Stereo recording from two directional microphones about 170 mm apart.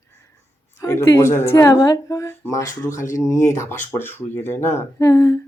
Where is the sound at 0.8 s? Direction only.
15° left (ahead or behind).